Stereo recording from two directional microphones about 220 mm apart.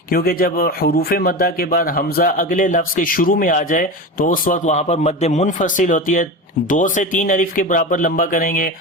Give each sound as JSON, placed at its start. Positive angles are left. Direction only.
{"t": 0.1, "sound": "a man's voice", "side_deg": 40}